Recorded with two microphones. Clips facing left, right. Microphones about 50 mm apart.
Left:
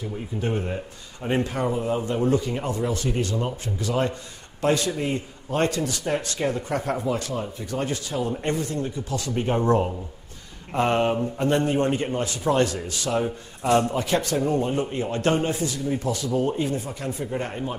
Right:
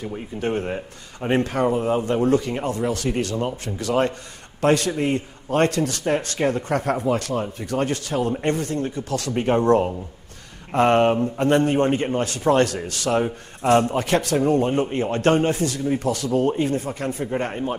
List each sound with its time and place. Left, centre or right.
0.4 s a man's voice: right
1.4 s a man's voice: right
2.2 s a man's voice: right
2.5 s a man's voice: right
10.7 s a man's voice: right
12.2 s a man's voice: right
13.2 s a man's voice: right
13.9 s a man's voice: right